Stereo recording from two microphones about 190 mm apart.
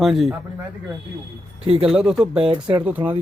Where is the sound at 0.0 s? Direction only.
Centre (ahead or behind).